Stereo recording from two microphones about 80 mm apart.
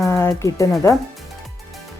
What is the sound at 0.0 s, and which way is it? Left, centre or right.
Music, left.